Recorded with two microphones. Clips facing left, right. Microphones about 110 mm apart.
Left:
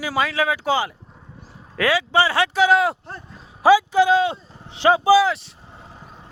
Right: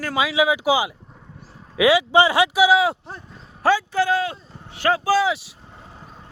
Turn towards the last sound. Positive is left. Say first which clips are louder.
# left 3 dB
turn(degrees=0)  # may be behind; listen again after turning